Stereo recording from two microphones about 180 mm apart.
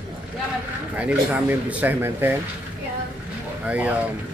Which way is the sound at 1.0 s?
10° right (ahead or behind).